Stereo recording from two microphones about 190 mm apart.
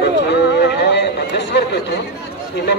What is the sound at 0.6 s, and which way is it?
Speech, 60° left (ahead or behind).